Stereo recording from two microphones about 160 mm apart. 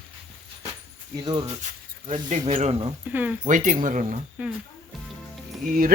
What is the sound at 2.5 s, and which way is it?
Speech, 45° right (ahead or behind).